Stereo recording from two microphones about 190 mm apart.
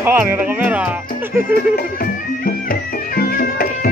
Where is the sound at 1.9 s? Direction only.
50° left (ahead or behind).